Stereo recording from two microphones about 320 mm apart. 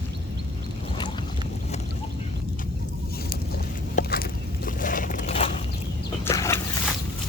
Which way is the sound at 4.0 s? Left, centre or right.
Left.